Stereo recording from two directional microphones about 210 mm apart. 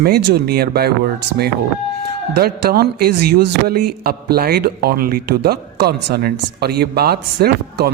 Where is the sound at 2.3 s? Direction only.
45° right (ahead or behind).